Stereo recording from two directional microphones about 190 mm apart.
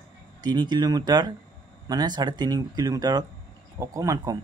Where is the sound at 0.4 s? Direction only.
20° right (ahead or behind).